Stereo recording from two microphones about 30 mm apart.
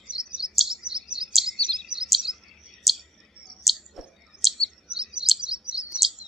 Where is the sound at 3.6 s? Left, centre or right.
Centre.